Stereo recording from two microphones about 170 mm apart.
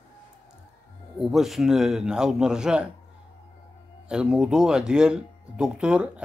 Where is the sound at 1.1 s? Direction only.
Centre (ahead or behind).